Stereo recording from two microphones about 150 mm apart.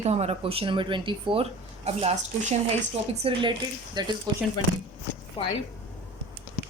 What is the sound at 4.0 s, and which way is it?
Speech, 30° right (ahead or behind).